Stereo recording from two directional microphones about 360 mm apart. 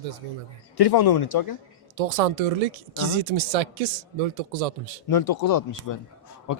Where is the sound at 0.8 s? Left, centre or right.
Left.